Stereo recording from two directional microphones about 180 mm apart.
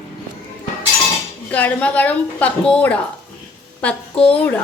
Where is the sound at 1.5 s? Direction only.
10° left (ahead or behind).